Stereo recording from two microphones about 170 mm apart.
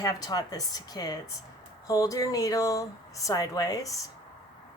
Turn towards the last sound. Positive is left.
turn(degrees=20)  # may be behind; listen again after turning